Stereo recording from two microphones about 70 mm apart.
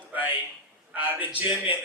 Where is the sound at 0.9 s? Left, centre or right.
Right.